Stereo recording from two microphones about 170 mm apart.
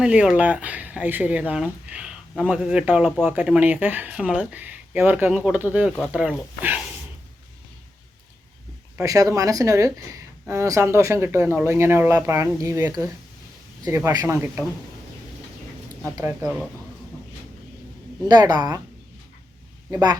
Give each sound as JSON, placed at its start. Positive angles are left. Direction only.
{"t": 0.0, "sound": "speech", "side_deg": -5}
{"t": 9.0, "sound": "speech", "side_deg": -20}
{"t": 16.1, "sound": "speech", "side_deg": -10}
{"t": 18.3, "sound": "speech", "side_deg": -25}
{"t": 19.9, "sound": "speech", "side_deg": -25}